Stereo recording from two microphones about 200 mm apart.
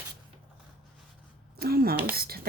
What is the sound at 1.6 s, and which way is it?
Speech, 50° right (ahead or behind).